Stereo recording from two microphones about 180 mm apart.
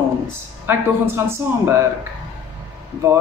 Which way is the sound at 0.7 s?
15° right (ahead or behind).